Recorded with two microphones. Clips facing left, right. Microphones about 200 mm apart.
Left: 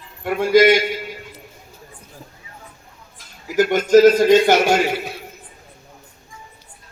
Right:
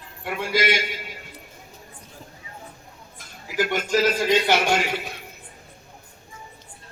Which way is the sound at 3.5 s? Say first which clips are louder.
Left 10 dB; 45° left (ahead or behind).